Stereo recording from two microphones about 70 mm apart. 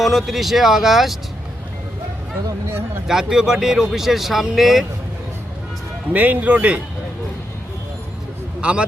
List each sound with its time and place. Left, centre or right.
0.0 s speech: centre
3.1 s speech: centre
6.1 s speech: right